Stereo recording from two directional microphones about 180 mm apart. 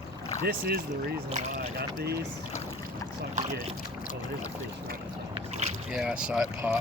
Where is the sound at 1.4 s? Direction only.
45° right (ahead or behind).